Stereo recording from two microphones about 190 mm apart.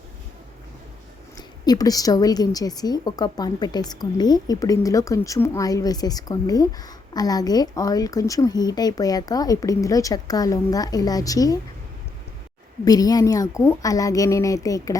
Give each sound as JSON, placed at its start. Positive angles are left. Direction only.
{"t": 1.4, "sound": "a woman's voice", "side_deg": 20}
{"t": 12.8, "sound": "speech", "side_deg": 20}